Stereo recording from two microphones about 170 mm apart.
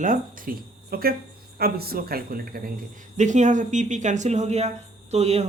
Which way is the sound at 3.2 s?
45° right (ahead or behind).